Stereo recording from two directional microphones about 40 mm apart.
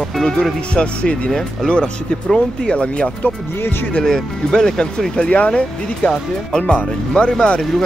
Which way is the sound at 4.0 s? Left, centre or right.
Centre.